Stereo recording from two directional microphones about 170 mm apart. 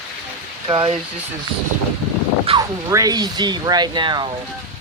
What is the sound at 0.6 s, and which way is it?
Speech, 30° right (ahead or behind).